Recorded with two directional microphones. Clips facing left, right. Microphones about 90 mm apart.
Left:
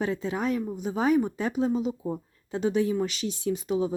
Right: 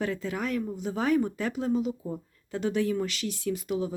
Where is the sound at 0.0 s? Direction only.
20° left (ahead or behind).